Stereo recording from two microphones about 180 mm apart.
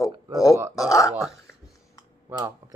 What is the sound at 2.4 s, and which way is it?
Speech, 20° right (ahead or behind).